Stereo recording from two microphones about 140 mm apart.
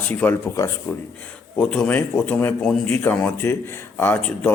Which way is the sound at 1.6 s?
10° left (ahead or behind).